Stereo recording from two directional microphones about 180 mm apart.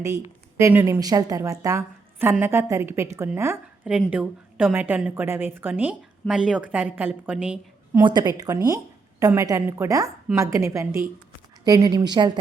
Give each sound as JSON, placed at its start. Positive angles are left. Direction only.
{"t": 0.0, "sound": "a woman's voice", "side_deg": -15}
{"t": 7.9, "sound": "a woman's voice", "side_deg": -20}